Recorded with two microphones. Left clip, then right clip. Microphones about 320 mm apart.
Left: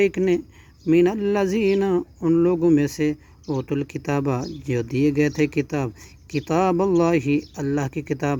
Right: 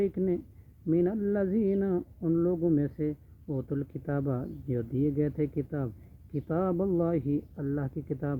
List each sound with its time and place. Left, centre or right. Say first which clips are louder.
0.0 s speech: left 10 dB; left
3.4 s speech: left 9 dB; left